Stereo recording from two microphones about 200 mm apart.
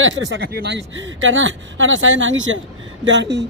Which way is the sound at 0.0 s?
65° right (ahead or behind).